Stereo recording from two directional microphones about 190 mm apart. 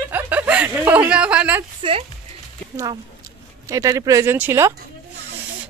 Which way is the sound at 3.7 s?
15° right (ahead or behind).